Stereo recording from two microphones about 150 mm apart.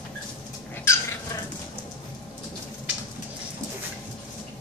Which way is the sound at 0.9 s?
15° left (ahead or behind).